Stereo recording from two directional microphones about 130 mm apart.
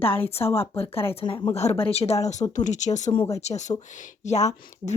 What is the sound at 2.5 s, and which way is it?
A woman's voice, 70° left (ahead or behind).